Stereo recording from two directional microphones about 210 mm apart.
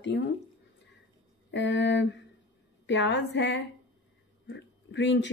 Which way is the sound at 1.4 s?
60° left (ahead or behind).